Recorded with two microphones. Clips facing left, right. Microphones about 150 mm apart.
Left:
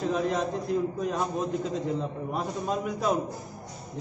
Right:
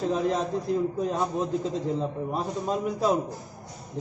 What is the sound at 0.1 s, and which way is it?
Speech, 30° right (ahead or behind).